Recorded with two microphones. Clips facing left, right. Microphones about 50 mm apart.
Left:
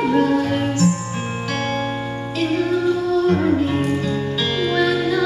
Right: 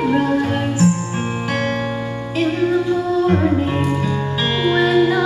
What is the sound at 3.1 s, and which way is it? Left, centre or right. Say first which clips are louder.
Music: right 1 dB; centre.